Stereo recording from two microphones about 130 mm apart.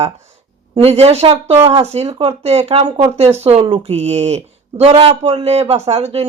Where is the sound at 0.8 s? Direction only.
50° right (ahead or behind).